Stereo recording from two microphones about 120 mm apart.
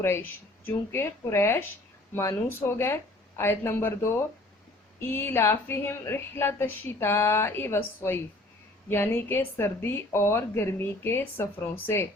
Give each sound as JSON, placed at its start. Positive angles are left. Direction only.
{"t": 0.0, "sound": "a woman's voice", "side_deg": 20}